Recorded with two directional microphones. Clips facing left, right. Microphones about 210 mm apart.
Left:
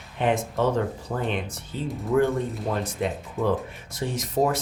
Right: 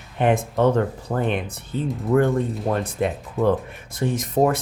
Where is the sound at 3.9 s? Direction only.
55° right (ahead or behind).